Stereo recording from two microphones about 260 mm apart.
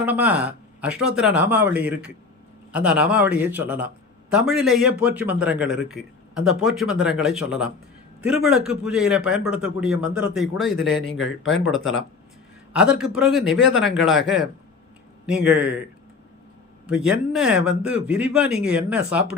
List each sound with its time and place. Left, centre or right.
0.0 s a man's voice: centre
11.1 s speech: left
12.7 s a man's voice: centre
16.8 s a man's voice: centre